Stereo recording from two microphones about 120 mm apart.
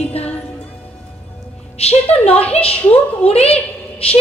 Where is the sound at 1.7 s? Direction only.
60° left (ahead or behind).